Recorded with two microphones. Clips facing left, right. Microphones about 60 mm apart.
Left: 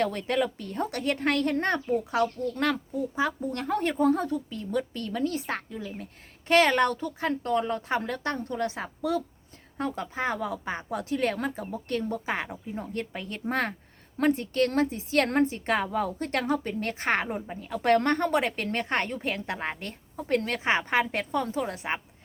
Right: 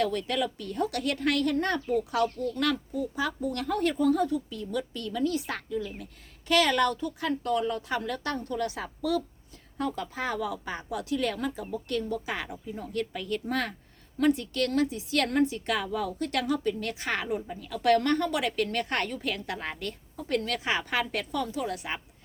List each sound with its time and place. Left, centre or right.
0.0 s a woman's voice: left